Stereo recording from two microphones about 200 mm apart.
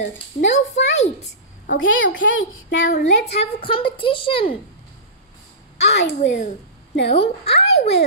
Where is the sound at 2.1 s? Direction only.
70° left (ahead or behind).